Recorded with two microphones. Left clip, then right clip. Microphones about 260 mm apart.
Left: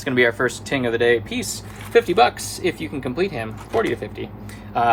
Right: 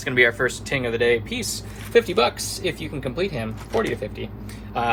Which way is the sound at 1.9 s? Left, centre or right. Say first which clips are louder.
Left 3 dB; left.